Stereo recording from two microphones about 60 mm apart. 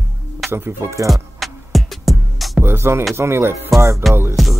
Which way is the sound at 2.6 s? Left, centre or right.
Right.